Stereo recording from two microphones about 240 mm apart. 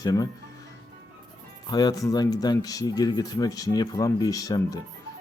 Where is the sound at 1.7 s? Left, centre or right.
Centre.